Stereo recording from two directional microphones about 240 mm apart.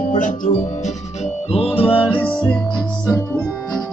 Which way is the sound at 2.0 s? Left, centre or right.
Centre.